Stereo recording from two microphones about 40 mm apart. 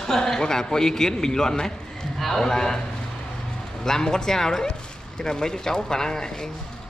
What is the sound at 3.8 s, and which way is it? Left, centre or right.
Speech, centre.